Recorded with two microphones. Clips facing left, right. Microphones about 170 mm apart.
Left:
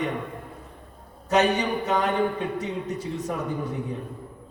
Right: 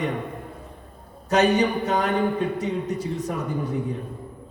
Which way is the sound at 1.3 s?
40° right (ahead or behind).